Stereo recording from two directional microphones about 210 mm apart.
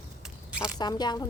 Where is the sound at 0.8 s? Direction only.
20° left (ahead or behind).